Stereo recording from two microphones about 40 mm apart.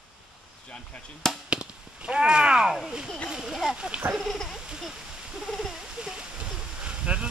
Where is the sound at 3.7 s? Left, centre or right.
Right.